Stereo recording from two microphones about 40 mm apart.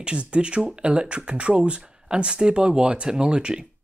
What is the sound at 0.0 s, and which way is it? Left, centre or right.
Speech, right.